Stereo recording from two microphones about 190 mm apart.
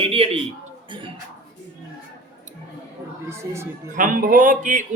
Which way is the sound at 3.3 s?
15° right (ahead or behind).